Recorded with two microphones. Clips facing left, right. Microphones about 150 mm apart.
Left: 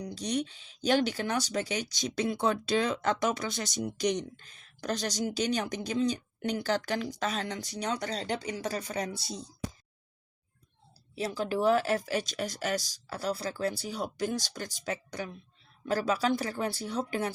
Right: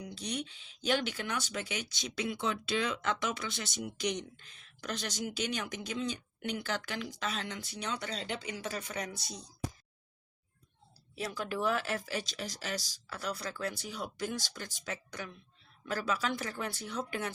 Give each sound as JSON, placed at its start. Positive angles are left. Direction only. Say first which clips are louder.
{"t": 0.0, "sound": "speech", "louder": "left 7 dB", "side_deg": 40}
{"t": 11.1, "sound": "speech", "louder": "left 6 dB", "side_deg": 30}